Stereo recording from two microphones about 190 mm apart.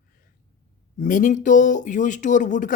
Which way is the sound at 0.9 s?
45° left (ahead or behind).